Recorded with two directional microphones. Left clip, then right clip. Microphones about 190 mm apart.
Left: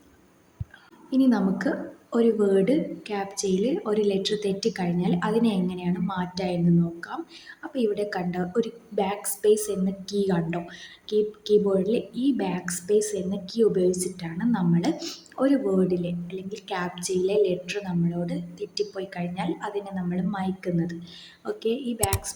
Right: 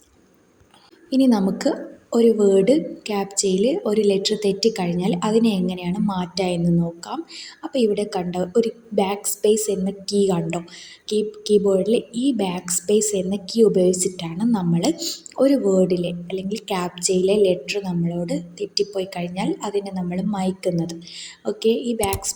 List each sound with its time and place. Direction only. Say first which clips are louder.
1.1 s a woman's voice: right 4 dB; 25° right (ahead or behind)
7.6 s a woman's voice: right 6 dB; 15° right (ahead or behind)